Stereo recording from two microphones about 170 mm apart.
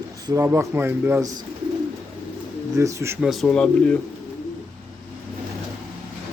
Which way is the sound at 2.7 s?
20° right (ahead or behind).